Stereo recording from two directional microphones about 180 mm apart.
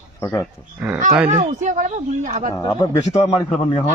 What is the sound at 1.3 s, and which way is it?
Speech, 40° right (ahead or behind).